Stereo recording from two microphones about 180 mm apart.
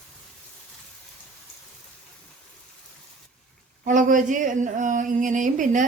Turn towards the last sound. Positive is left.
turn(degrees=-45)  # may be behind; listen again after turning